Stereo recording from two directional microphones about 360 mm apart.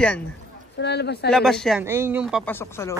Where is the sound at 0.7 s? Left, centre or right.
Left.